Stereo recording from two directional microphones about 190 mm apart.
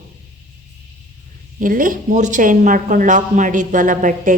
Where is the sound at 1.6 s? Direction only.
45° right (ahead or behind).